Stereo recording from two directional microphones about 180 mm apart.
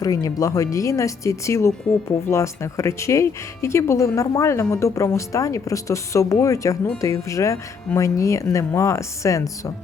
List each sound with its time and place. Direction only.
0.0 s speech: 20° left (ahead or behind)